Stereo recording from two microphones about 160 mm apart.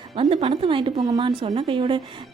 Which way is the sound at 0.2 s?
35° right (ahead or behind).